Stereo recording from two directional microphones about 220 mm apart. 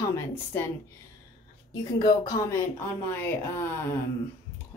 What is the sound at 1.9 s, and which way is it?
Speech, 15° left (ahead or behind).